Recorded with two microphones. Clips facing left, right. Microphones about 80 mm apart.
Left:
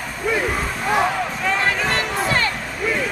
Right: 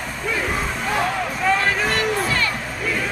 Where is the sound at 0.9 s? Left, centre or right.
Centre.